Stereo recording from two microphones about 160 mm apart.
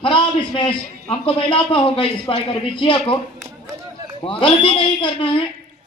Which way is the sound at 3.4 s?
15° right (ahead or behind).